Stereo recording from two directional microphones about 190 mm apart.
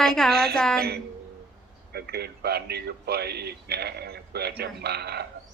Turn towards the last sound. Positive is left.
turn(degrees=-60)  # may be behind; listen again after turning